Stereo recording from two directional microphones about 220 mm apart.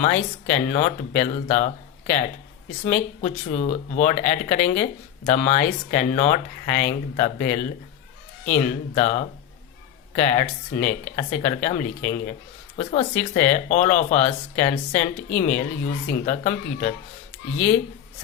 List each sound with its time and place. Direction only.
0.0 s speech: 30° left (ahead or behind)